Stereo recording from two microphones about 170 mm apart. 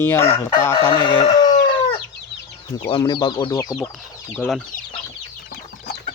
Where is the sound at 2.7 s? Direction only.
30° left (ahead or behind).